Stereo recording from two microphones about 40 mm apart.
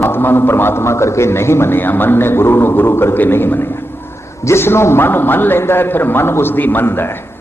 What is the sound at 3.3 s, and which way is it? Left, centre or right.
Speech, left.